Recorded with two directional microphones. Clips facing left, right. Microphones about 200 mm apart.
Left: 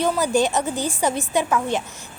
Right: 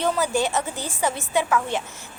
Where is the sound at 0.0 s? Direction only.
15° left (ahead or behind).